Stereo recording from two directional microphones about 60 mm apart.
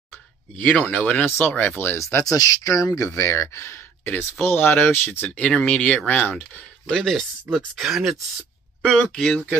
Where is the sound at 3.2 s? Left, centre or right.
Left.